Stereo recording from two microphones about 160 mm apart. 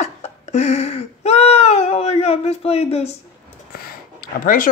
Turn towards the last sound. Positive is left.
turn(degrees=60)  # may be behind; listen again after turning